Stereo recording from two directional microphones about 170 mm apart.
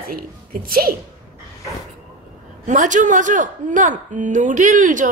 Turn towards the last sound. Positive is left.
turn(degrees=-50)  # may be behind; listen again after turning